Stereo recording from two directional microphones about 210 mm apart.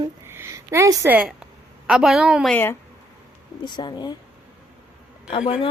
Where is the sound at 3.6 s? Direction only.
20° left (ahead or behind).